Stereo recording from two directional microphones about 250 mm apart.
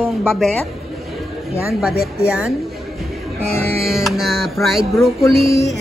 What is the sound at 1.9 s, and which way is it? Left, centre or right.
Speech, left.